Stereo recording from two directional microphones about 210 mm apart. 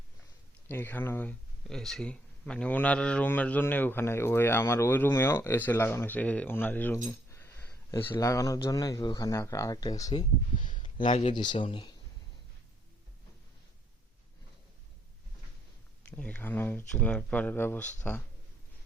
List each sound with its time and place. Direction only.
0.7 s speech: 10° left (ahead or behind)
11.0 s speech: 30° left (ahead or behind)
16.0 s speech: 5° left (ahead or behind)